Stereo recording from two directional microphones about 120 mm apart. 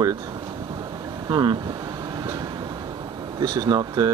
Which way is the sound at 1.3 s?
40° right (ahead or behind).